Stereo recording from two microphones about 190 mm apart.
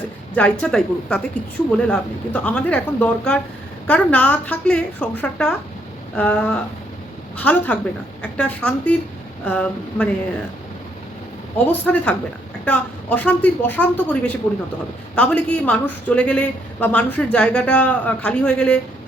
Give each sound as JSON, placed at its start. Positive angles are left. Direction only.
{"t": 0.6, "sound": "a woman's voice", "side_deg": 5}
{"t": 11.5, "sound": "a woman's voice", "side_deg": 5}